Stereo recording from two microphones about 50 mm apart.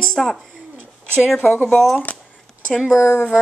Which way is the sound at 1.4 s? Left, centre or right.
Left.